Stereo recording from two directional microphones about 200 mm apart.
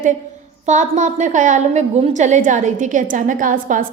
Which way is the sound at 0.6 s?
35° right (ahead or behind).